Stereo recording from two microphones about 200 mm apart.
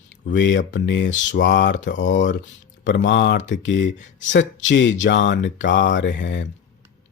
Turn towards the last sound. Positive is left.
turn(degrees=65)  # may be behind; listen again after turning